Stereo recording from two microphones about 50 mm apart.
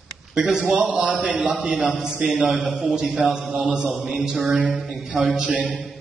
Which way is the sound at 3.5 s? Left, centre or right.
Right.